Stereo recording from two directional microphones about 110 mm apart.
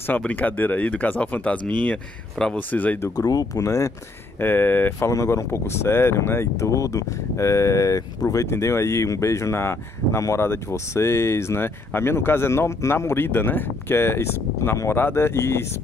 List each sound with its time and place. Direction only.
0.2 s speech: 15° left (ahead or behind)
3.2 s speech: 35° left (ahead or behind)